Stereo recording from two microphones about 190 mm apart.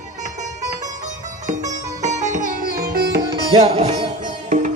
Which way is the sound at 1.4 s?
40° right (ahead or behind).